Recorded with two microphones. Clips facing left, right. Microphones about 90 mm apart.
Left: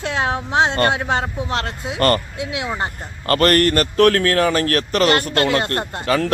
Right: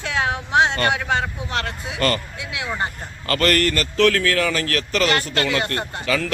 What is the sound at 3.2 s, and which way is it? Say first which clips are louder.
A man's voice: left 4 dB; 40° left (ahead or behind).